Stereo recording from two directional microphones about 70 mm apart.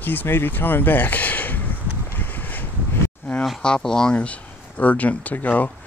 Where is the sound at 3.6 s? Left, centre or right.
Centre.